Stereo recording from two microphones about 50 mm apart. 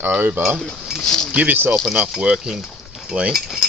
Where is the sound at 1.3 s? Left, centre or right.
Right.